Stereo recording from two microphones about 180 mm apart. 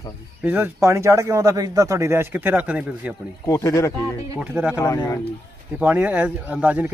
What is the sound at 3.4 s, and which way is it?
Speech, 20° left (ahead or behind).